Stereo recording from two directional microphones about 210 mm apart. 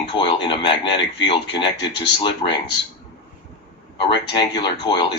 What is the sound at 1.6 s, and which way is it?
Speech, 55° left (ahead or behind).